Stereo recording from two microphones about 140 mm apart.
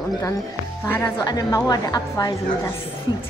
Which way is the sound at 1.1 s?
25° left (ahead or behind).